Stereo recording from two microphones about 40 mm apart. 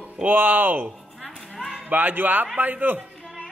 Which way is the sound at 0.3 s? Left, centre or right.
Right.